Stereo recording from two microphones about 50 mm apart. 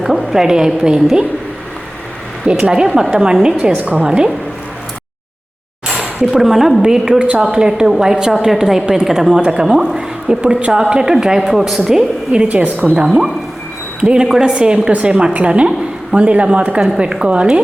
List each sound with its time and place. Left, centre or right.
0.0 s a woman's voice: centre
2.6 s a woman's voice: centre
5.9 s a sound: centre
6.3 s a woman's voice: centre
12.3 s a woman's voice: right
13.0 s a woman's voice: centre
14.3 s a woman's voice: centre
14.5 s a woman's voice: centre